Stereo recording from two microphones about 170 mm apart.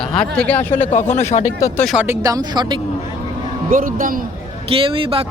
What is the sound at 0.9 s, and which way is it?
Speech, 40° left (ahead or behind).